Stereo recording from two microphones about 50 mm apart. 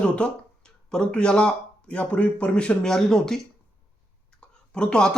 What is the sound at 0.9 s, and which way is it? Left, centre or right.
Speech, centre.